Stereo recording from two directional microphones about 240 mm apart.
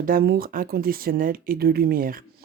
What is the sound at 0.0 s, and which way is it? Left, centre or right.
Speech, right.